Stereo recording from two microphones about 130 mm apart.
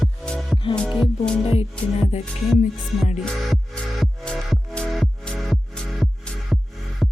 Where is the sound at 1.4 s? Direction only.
50° left (ahead or behind).